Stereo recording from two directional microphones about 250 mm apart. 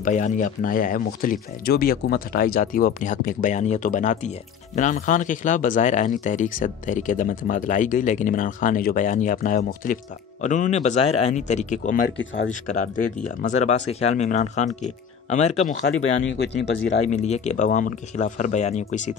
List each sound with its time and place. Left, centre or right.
0.0 s speech: left
13.4 s speech: left
15.8 s speech: left
17.1 s speech: left